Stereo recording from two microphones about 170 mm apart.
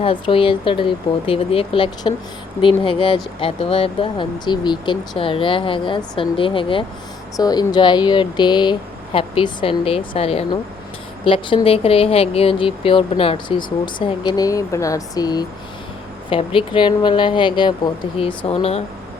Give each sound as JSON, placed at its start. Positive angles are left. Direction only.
{"t": 0.0, "sound": "speech", "side_deg": 30}